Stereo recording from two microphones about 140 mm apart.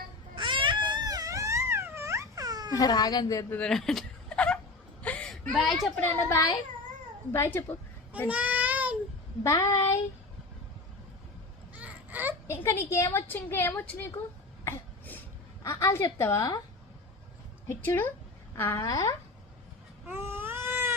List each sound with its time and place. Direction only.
0.3 s baby cry: 35° right (ahead or behind)
2.7 s speech: 30° left (ahead or behind)
3.5 s a sound: 5° left (ahead or behind)
5.0 s whimper: 5° left (ahead or behind)
5.5 s speech: centre (ahead or behind)
7.3 s a woman's voice: 15° left (ahead or behind)
8.3 s child singing: 10° right (ahead or behind)
9.4 s child singing: 20° left (ahead or behind)
11.7 s a sound: 10° right (ahead or behind)
12.5 s a woman's voice: 20° left (ahead or behind)
14.6 s cough: 15° left (ahead or behind)
15.6 s speech: 20° left (ahead or behind)
17.7 s a woman's voice: 15° left (ahead or behind)
20.1 s baby cry: 15° right (ahead or behind)